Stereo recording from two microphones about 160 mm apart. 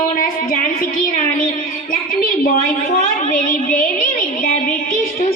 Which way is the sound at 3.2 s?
60° left (ahead or behind).